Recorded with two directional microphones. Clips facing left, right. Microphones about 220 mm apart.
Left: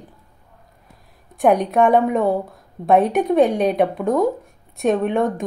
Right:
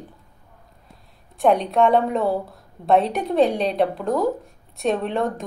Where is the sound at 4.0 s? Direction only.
Centre (ahead or behind).